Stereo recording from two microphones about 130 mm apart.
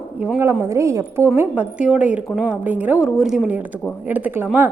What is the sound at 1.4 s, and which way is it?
A woman's voice, 10° right (ahead or behind).